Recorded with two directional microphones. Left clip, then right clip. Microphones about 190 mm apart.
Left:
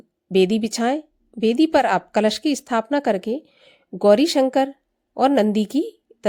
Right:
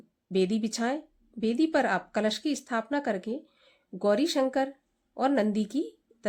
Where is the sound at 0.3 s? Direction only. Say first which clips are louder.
Left 10 dB; 40° left (ahead or behind).